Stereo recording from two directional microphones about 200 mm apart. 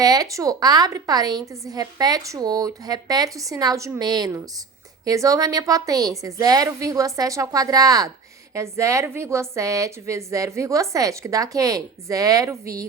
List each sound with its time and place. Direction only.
0.0 s a woman's voice: 20° right (ahead or behind)